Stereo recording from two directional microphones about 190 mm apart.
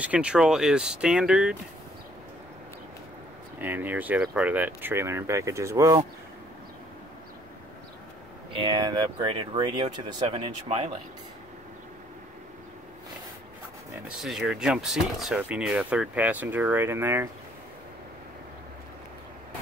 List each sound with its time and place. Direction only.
0.0 s speech: 5° right (ahead or behind)
3.5 s speech: 10° right (ahead or behind)
8.5 s speech: 25° right (ahead or behind)
14.0 s speech: centre (ahead or behind)